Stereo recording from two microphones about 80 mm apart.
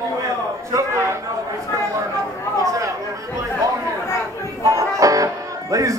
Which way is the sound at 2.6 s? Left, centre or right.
Right.